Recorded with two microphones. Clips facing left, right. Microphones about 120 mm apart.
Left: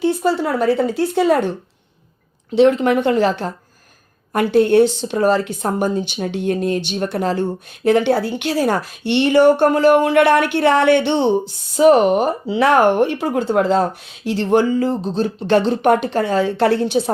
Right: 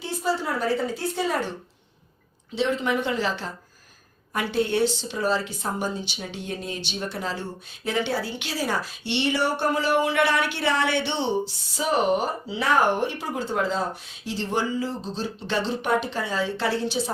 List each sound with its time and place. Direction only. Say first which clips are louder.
0.0 s speech: left 9 dB; 65° left (ahead or behind)
2.6 s speech: left 11 dB; 65° left (ahead or behind)